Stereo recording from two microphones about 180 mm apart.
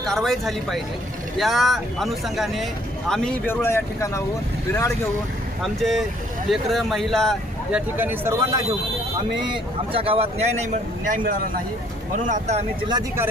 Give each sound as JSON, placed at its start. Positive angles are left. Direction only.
{"t": 0.0, "sound": "speech", "side_deg": 0}
{"t": 5.6, "sound": "speech", "side_deg": 0}
{"t": 7.9, "sound": "speech", "side_deg": -10}
{"t": 11.1, "sound": "speech", "side_deg": -50}
{"t": 12.9, "sound": "speech", "side_deg": -20}